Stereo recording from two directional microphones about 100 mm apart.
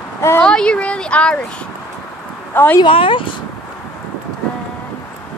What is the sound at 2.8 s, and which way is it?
Speech, 60° left (ahead or behind).